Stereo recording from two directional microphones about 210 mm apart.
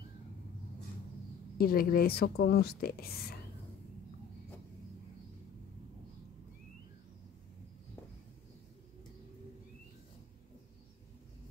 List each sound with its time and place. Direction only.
1.6 s speech: 45° left (ahead or behind)